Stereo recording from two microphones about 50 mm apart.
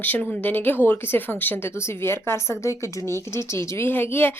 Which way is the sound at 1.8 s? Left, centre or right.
Left.